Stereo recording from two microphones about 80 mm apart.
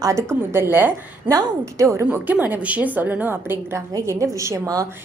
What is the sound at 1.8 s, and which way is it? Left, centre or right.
Speech, right.